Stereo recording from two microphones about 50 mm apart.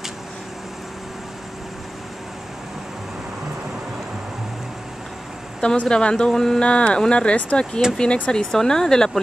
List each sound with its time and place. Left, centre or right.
5.6 s speech: centre